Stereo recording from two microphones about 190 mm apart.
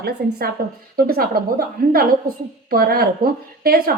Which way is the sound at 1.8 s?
50° right (ahead or behind).